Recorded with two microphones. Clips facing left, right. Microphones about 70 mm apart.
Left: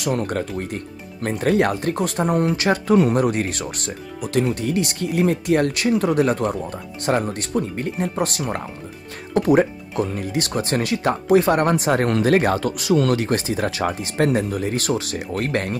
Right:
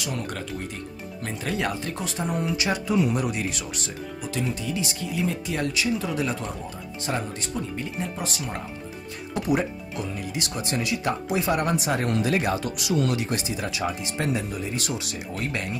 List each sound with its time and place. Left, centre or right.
0.0 s speech: left
9.3 s speech: left